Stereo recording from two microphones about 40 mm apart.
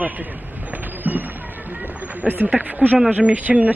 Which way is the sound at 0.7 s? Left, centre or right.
Right.